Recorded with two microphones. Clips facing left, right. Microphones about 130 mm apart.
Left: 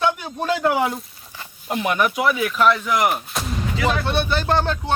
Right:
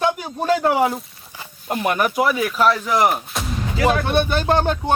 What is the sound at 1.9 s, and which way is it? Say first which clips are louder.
Speech: right 1 dB; 40° right (ahead or behind).